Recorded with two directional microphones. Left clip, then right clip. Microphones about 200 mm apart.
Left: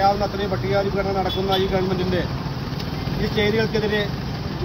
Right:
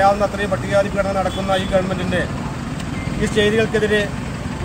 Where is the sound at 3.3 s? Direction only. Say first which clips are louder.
Right 5 dB; 10° right (ahead or behind).